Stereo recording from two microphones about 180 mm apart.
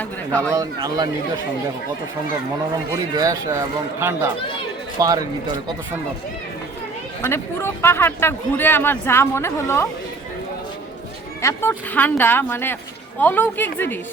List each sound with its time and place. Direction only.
0.0 s a sound: 10° left (ahead or behind)
0.5 s speech: 20° right (ahead or behind)
2.9 s a man's voice: 20° right (ahead or behind)
7.2 s speech: 15° left (ahead or behind)
11.4 s speech: 15° left (ahead or behind)